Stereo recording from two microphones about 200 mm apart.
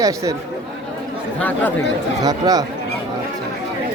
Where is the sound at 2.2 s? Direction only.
20° right (ahead or behind).